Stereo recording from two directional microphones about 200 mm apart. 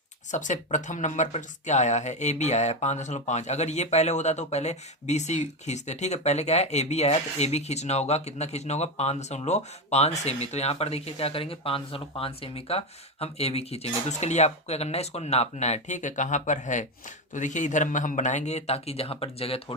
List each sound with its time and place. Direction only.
0.3 s speech: 40° left (ahead or behind)